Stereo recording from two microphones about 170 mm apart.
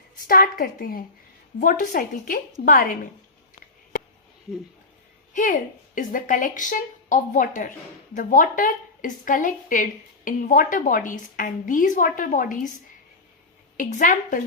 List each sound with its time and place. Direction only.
0.3 s a woman's voice: 55° left (ahead or behind)
5.3 s a woman's voice: 50° left (ahead or behind)
13.7 s a woman's voice: 50° left (ahead or behind)